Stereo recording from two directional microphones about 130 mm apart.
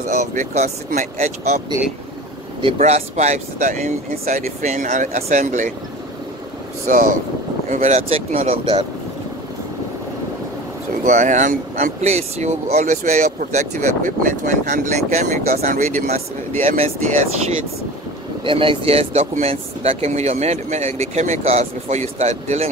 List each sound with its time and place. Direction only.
0.0 s speech: 65° right (ahead or behind)
2.8 s speech: 60° right (ahead or behind)
6.9 s speech: 75° right (ahead or behind)
7.7 s speech: 60° right (ahead or behind)
11.1 s speech: 70° right (ahead or behind)
16.6 s speech: 50° right (ahead or behind)
18.4 s speech: 40° right (ahead or behind); by 22.7 s 60° right (ahead or behind)